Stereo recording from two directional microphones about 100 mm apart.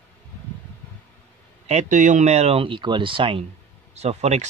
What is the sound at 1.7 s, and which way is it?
A man's voice, 90° right.